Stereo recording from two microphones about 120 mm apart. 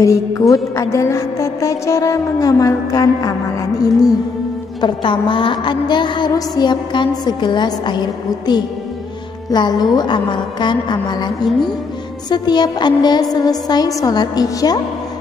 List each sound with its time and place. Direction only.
0.0 s music: 25° left (ahead or behind)
4.8 s a woman's voice: 40° left (ahead or behind)